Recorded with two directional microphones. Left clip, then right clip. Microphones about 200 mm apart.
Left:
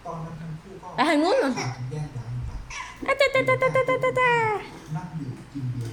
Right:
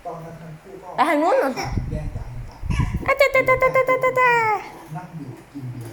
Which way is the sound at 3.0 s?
5° left (ahead or behind).